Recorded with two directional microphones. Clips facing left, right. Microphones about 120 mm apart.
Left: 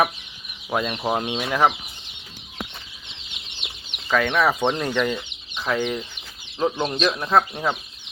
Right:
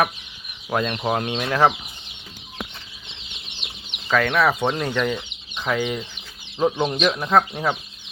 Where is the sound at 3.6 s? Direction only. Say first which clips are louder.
Right 1 dB; 5° left (ahead or behind).